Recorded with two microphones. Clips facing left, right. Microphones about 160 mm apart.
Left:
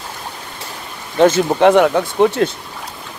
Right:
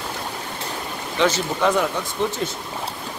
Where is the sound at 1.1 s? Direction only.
50° left (ahead or behind).